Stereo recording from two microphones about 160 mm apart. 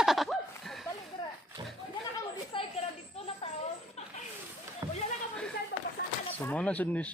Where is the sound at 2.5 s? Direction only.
30° left (ahead or behind).